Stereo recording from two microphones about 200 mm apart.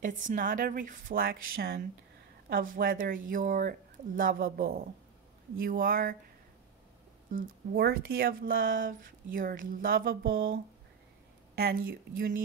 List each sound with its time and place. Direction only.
0.0 s speech: 40° right (ahead or behind)
7.3 s speech: 50° right (ahead or behind)
11.5 s speech: 55° right (ahead or behind)